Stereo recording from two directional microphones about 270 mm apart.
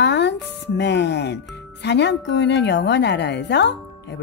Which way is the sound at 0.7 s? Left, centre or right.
Left.